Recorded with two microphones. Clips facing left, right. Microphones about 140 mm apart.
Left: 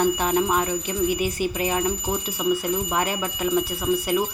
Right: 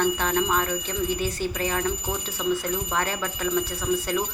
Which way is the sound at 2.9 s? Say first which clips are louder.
Left 2 dB; 15° left (ahead or behind).